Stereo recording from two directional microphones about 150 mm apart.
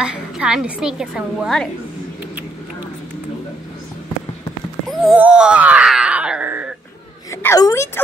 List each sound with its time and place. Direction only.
0.0 s speech: 5° right (ahead or behind)
5.1 s wail: 10° right (ahead or behind)
7.2 s a woman's voice: 20° left (ahead or behind)